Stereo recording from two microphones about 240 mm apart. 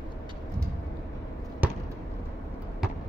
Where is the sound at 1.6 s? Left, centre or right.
Centre.